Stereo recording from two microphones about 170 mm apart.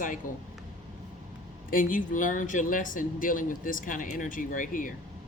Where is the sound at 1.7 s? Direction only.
50° left (ahead or behind).